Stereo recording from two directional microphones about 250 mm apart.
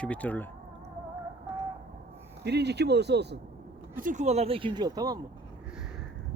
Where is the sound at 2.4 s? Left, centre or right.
Right.